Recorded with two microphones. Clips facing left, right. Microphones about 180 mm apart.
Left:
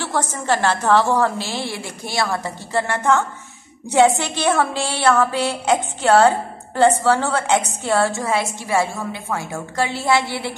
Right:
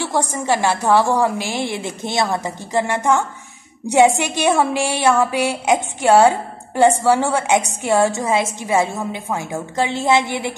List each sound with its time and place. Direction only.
0.0 s a woman's voice: 15° right (ahead or behind)